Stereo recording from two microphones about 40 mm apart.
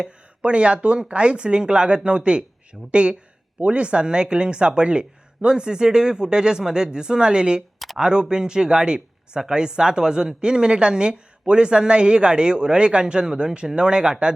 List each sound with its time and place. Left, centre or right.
0.0 s speech: right